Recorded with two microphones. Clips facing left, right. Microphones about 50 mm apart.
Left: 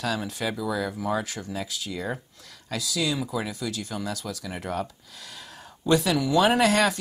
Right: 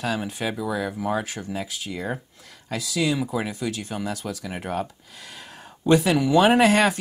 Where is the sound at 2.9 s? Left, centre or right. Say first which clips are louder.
Right 4 dB; right.